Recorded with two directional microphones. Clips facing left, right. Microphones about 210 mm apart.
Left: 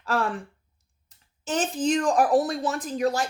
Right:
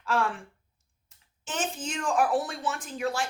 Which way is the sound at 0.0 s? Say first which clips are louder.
Left 2 dB; 40° left (ahead or behind).